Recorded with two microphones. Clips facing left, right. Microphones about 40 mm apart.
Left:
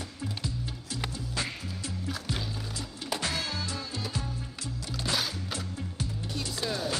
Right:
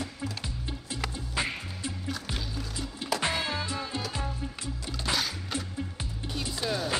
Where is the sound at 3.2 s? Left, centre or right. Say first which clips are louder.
Right 3 dB; right.